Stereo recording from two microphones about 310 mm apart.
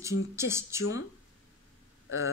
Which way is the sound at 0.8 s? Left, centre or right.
Left.